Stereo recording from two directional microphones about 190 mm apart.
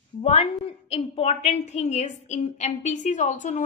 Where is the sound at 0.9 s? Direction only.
35° left (ahead or behind).